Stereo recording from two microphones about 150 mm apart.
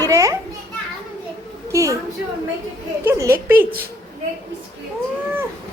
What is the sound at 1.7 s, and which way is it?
Speech, 20° right (ahead or behind).